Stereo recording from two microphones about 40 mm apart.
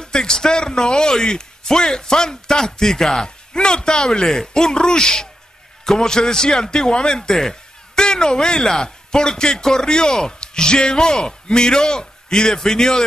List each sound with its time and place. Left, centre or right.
0.0 s a man's voice: centre